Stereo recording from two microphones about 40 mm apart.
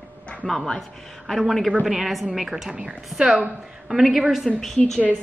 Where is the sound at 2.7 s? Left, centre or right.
Right.